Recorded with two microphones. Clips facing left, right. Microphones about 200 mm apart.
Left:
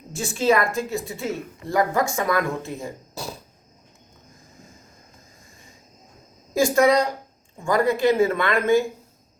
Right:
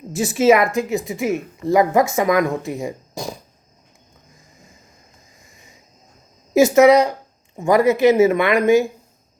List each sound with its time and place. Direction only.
0.1 s a woman's voice: 5° right (ahead or behind)
0.5 s speech: 20° right (ahead or behind)
6.5 s speech: 20° right (ahead or behind)